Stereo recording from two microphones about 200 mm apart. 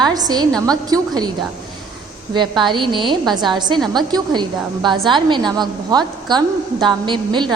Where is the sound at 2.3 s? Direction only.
25° right (ahead or behind).